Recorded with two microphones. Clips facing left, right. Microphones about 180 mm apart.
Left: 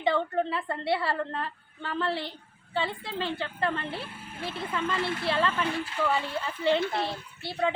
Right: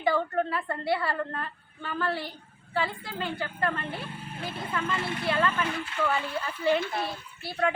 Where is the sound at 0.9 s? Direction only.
25° left (ahead or behind).